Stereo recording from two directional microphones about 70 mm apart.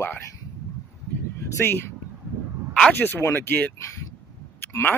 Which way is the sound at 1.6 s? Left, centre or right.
Left.